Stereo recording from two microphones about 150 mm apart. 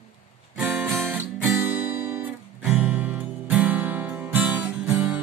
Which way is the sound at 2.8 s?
10° right (ahead or behind).